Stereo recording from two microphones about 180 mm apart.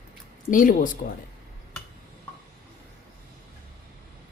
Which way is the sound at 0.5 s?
50° left (ahead or behind).